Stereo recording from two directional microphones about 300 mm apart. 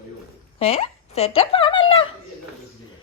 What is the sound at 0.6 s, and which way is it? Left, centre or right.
Speech, centre.